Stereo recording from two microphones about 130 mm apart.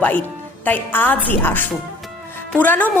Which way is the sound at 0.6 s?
15° left (ahead or behind).